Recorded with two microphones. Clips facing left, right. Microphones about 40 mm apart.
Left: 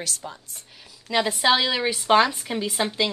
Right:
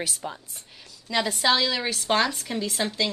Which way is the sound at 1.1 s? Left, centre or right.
Centre.